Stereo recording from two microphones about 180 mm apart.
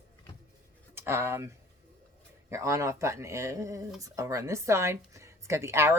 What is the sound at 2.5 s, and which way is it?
Speech, 15° right (ahead or behind).